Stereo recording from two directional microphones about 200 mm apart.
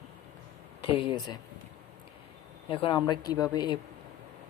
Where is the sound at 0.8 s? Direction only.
25° left (ahead or behind).